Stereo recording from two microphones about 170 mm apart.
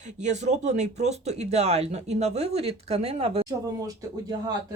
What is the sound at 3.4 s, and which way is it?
Speech, 20° right (ahead or behind).